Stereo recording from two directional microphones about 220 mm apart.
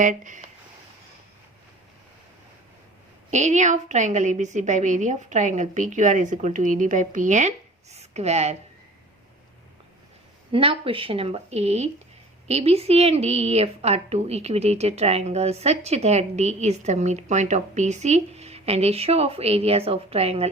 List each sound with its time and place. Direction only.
0.0 s a woman's voice: 35° right (ahead or behind)
3.2 s a woman's voice: 30° right (ahead or behind)
10.5 s a woman's voice: 25° right (ahead or behind)